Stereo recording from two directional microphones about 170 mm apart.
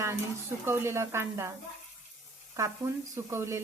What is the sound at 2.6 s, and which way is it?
Speech, 20° right (ahead or behind).